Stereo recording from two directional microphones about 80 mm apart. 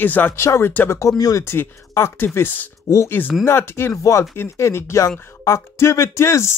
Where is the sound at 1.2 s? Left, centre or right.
Left.